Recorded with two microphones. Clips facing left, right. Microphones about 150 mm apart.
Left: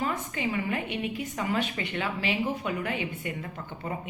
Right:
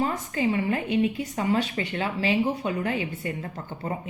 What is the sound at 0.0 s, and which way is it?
A woman's voice, 35° right (ahead or behind).